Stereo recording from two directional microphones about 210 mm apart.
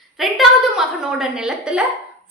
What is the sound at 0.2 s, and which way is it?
A woman's voice, centre (ahead or behind).